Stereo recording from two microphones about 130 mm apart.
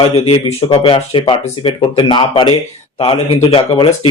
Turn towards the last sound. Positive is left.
turn(degrees=45)  # may be behind; listen again after turning